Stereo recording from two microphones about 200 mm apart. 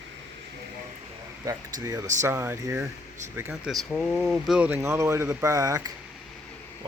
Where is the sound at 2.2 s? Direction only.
15° right (ahead or behind).